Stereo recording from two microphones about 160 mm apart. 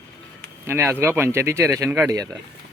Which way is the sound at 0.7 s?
10° right (ahead or behind).